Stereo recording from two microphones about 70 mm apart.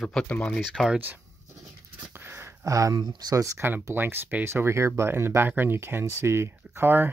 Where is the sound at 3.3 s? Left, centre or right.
Right.